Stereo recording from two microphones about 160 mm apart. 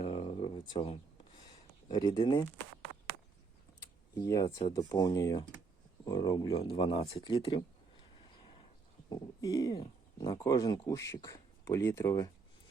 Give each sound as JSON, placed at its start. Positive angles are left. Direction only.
{"t": 0.0, "sound": "a sound", "side_deg": 35}
{"t": 1.9, "sound": "speech", "side_deg": 25}
{"t": 4.1, "sound": "speech", "side_deg": 20}
{"t": 9.0, "sound": "speech", "side_deg": 25}